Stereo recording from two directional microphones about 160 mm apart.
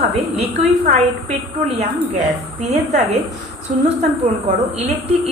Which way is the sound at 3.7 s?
55° right (ahead or behind).